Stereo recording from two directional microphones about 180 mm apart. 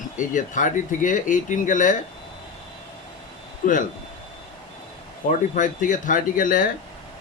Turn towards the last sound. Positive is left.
turn(degrees=50)  # may be behind; listen again after turning